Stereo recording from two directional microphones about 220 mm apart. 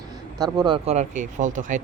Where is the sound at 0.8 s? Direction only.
30° right (ahead or behind).